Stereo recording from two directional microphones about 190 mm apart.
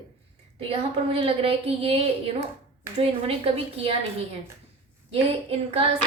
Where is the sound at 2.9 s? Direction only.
30° right (ahead or behind).